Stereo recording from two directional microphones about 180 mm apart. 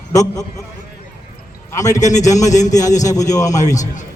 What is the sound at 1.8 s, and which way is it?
Speech, 20° left (ahead or behind).